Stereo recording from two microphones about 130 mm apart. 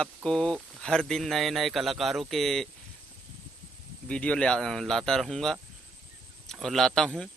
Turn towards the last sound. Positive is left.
turn(degrees=5)  # may be behind; listen again after turning